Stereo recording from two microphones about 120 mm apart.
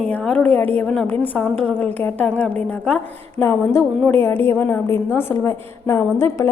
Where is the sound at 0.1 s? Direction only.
10° left (ahead or behind).